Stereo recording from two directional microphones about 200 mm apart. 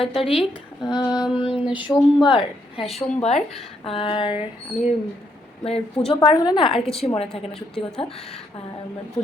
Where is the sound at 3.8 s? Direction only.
25° left (ahead or behind).